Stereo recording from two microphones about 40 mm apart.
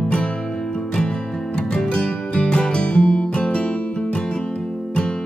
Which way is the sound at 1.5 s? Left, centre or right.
Left.